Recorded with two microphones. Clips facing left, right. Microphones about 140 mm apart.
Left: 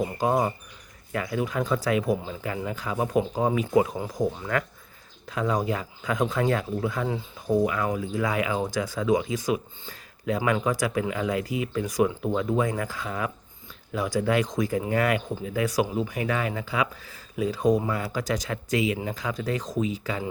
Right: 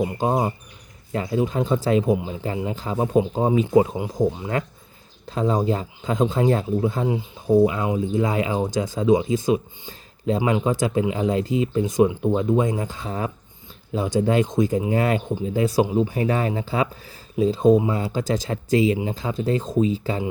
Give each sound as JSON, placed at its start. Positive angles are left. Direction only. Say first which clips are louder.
{"t": 0.0, "sound": "speech", "louder": "right 2 dB", "side_deg": -25}